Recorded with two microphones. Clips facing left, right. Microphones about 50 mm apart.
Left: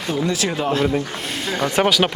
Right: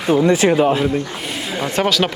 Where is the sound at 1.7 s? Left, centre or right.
Centre.